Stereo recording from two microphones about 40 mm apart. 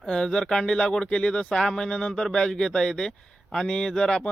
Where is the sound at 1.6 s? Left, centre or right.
Centre.